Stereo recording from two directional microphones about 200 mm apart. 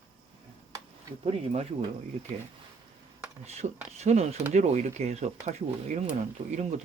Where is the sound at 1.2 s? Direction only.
30° right (ahead or behind).